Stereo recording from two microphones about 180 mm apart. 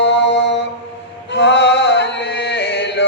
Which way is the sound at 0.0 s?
80° left.